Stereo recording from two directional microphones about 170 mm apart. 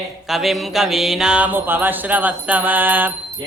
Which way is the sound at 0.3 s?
Centre (ahead or behind).